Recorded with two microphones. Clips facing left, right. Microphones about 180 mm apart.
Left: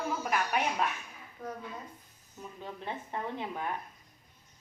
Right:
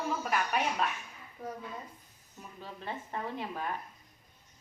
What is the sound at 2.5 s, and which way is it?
Speech, 15° left (ahead or behind).